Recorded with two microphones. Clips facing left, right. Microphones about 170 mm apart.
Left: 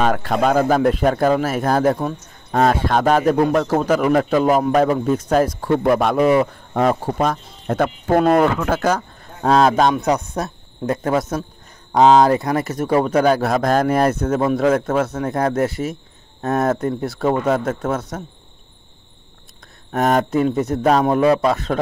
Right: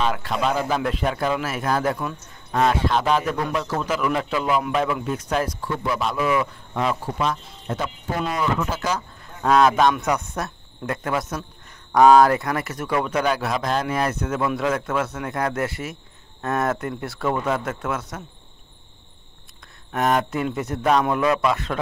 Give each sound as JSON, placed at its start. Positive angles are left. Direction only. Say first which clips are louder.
{"t": 0.0, "sound": "a man's voice", "louder": "left 6 dB", "side_deg": 50}
{"t": 9.4, "sound": "speech", "louder": "left 2 dB", "side_deg": 30}
{"t": 11.9, "sound": "speech", "louder": "left 1 dB", "side_deg": 25}
{"t": 12.5, "sound": "speech", "louder": "left 7 dB", "side_deg": 40}
{"t": 19.9, "sound": "speech", "louder": "left 4 dB", "side_deg": 40}